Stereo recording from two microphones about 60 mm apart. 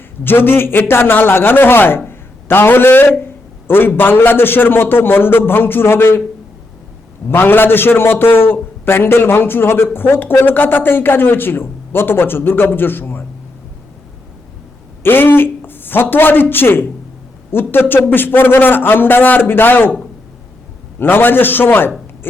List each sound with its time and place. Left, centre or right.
0.3 s a man's voice: left
7.3 s a man's voice: left
15.0 s a man's voice: left
21.0 s a man's voice: left